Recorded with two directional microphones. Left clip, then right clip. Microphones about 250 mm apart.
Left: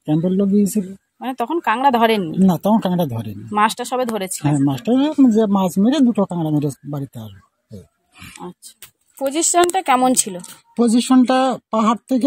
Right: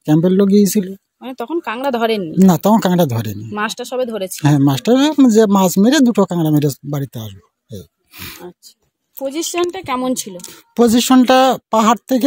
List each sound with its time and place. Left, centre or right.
0.0 s speech: right
1.2 s speech: centre
2.3 s speech: right
3.5 s speech: centre
4.4 s speech: right
9.2 s speech: centre
10.8 s speech: right